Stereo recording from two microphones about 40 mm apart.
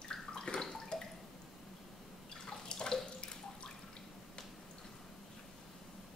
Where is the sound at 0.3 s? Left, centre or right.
Centre.